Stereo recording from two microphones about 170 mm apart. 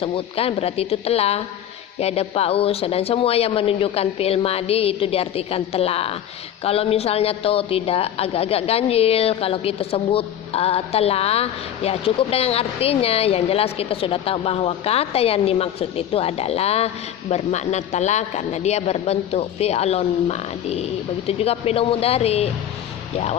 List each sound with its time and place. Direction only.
0.0 s a woman's voice: 35° left (ahead or behind)